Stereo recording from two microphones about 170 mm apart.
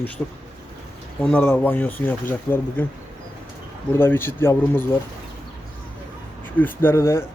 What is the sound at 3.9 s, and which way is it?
Speech, 15° left (ahead or behind).